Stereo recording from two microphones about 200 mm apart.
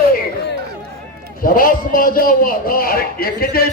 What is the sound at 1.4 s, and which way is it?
A man's voice, 45° left (ahead or behind).